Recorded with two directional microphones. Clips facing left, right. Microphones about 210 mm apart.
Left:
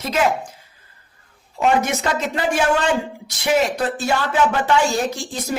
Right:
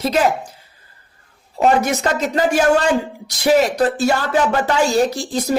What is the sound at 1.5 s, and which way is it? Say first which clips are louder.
A woman's voice: right 3 dB; 40° right (ahead or behind).